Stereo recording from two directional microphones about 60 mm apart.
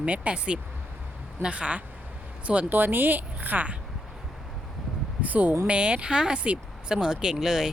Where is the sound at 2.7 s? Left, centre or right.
Right.